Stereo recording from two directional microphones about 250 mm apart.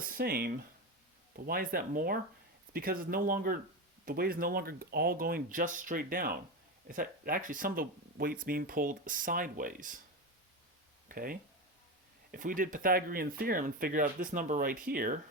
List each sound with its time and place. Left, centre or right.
0.0 s speech: right
11.1 s speech: right